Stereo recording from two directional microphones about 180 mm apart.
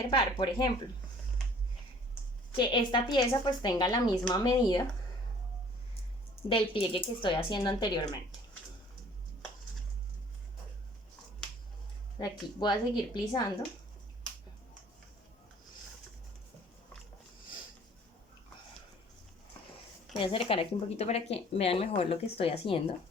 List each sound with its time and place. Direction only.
0.1 s a woman's voice: 25° left (ahead or behind)
2.5 s a woman's voice: 25° left (ahead or behind)
6.5 s a woman's voice: 30° left (ahead or behind)
12.2 s a woman's voice: 25° left (ahead or behind)
20.1 s speech: 30° left (ahead or behind)